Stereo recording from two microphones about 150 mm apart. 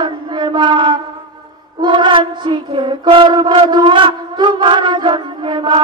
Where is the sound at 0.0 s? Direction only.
30° right (ahead or behind).